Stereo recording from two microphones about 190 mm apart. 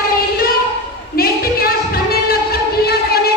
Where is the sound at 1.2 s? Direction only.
50° left (ahead or behind).